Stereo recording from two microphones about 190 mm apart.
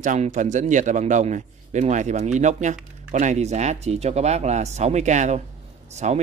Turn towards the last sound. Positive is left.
turn(degrees=-35)  # may be behind; listen again after turning